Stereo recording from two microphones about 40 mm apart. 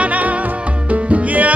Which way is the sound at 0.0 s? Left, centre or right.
Right.